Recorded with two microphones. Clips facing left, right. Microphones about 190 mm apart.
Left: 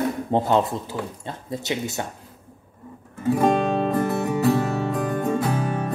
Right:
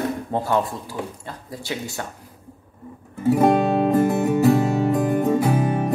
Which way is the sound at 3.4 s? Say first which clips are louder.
Right 3 dB; 15° right (ahead or behind).